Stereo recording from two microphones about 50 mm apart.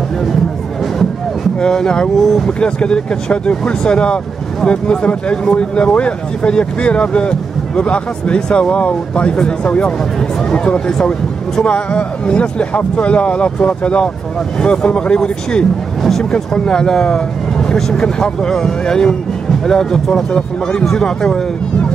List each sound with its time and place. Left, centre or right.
1.6 s speech: centre
16.0 s speech: centre